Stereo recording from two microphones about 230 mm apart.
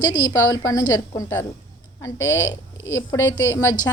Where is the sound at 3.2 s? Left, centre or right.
Left.